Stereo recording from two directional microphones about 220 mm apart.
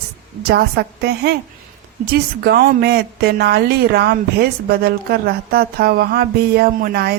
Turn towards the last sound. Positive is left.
turn(degrees=-45)  # may be behind; listen again after turning